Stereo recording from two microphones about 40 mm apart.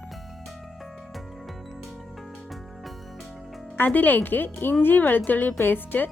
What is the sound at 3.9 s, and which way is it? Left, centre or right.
A woman's voice, left.